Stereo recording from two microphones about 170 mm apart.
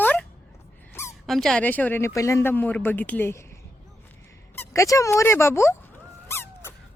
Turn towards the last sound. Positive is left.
turn(degrees=15)  # may be behind; listen again after turning